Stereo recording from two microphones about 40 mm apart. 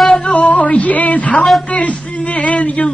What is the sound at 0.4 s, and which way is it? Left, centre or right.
Music, left.